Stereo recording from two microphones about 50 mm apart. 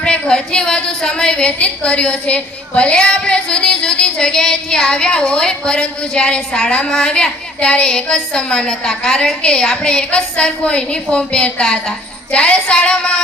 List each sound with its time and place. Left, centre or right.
0.0 s a woman's voice: centre